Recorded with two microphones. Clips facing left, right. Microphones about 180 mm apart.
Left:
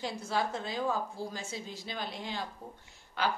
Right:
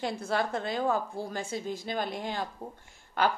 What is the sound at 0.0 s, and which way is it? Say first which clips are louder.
A woman's voice: right 3 dB; 55° right (ahead or behind).